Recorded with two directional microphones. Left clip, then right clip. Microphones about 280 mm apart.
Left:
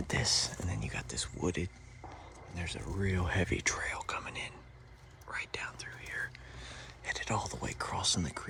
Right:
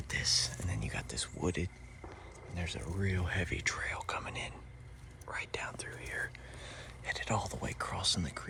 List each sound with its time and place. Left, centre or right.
0.4 s speech: centre